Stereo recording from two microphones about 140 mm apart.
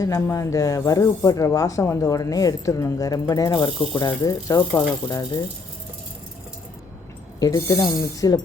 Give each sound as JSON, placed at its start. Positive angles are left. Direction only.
{"t": 0.0, "sound": "speech", "side_deg": 25}
{"t": 7.3, "sound": "speech", "side_deg": 25}